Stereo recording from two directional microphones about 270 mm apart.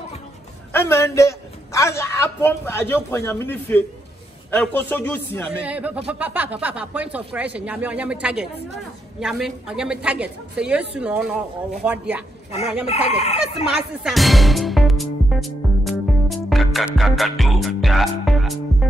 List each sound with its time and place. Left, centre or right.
0.7 s a man's voice: centre
5.6 s speech: centre
12.8 s speech: left
14.0 s music: centre